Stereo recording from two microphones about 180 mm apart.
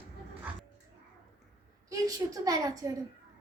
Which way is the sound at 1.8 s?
20° right (ahead or behind).